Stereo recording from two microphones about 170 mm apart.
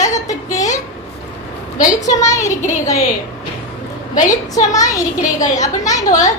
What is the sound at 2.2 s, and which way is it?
Speech, 20° left (ahead or behind).